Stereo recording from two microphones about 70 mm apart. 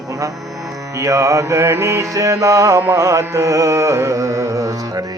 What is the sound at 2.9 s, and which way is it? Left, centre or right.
Carnatic music, right.